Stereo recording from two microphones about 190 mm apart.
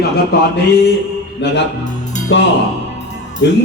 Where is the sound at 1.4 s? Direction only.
65° left (ahead or behind).